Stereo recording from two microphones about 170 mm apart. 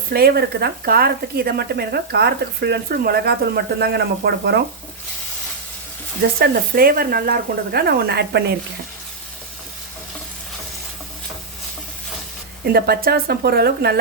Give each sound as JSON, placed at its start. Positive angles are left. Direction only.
{"t": 0.1, "sound": "speech", "side_deg": -65}
{"t": 6.4, "sound": "speech", "side_deg": -60}
{"t": 12.6, "sound": "speech", "side_deg": -65}